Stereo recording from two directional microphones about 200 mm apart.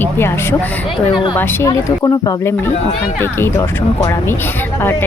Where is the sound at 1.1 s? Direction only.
25° left (ahead or behind).